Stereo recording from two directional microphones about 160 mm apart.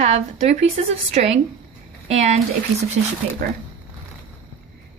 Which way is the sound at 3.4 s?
60° right (ahead or behind).